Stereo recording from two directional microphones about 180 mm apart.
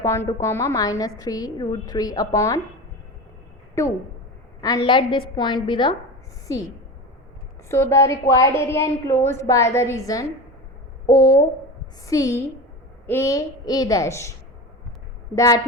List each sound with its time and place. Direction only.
0.0 s a woman's voice: 15° left (ahead or behind)
3.8 s a woman's voice: 15° left (ahead or behind)
4.9 s a woman's voice: 25° left (ahead or behind)
7.7 s a woman's voice: 15° left (ahead or behind)
15.4 s a woman's voice: 20° left (ahead or behind)